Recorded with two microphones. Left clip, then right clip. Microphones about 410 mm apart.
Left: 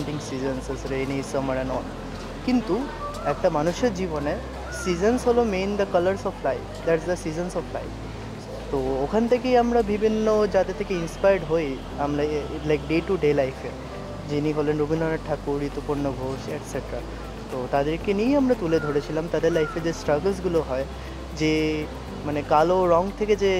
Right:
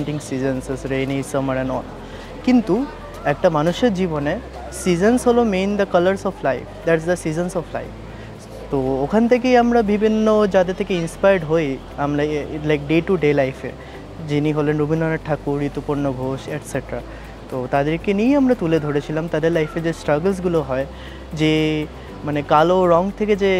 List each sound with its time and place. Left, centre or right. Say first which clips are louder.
0.3 s speech: right 7 dB; right
17.6 s speech: right 4 dB; right